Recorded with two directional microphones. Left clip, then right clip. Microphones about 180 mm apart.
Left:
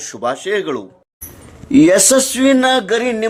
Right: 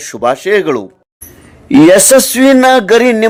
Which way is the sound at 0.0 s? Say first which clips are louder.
Right 7 dB; 35° right (ahead or behind).